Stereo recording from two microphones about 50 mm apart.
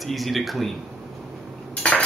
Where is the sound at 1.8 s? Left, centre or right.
Left.